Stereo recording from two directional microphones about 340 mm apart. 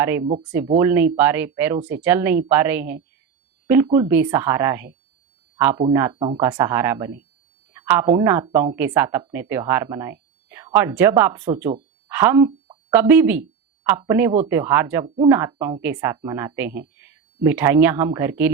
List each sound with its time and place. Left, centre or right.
0.0 s speech: centre